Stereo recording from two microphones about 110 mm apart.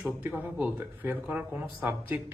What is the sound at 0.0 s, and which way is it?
Speech, 15° right (ahead or behind).